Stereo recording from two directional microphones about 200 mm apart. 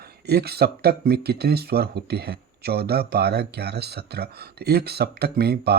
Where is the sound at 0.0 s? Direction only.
55° right (ahead or behind).